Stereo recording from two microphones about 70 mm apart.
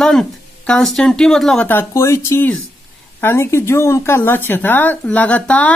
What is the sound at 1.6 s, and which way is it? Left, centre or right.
Speech, left.